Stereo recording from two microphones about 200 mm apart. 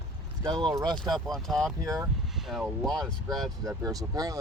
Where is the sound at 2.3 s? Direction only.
Centre (ahead or behind).